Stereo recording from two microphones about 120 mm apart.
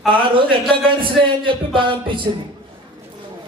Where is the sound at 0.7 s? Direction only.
45° right (ahead or behind).